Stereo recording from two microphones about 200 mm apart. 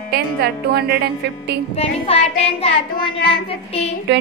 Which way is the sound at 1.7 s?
30° left (ahead or behind).